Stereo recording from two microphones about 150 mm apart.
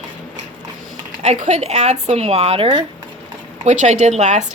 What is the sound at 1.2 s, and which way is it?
A woman's voice, 50° right (ahead or behind).